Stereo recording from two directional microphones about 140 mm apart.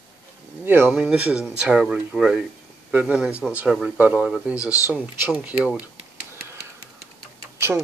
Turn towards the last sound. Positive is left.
turn(degrees=-20)  # may be behind; listen again after turning